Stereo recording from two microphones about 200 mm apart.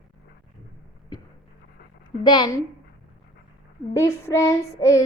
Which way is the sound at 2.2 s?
20° left (ahead or behind).